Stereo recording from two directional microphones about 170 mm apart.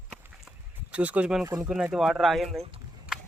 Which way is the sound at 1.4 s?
20° right (ahead or behind).